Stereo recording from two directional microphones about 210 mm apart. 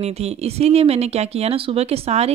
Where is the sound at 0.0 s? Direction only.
30° right (ahead or behind).